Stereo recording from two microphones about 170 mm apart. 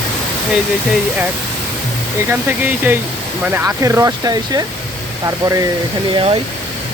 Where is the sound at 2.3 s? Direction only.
10° right (ahead or behind); by 6.4 s 30° right (ahead or behind).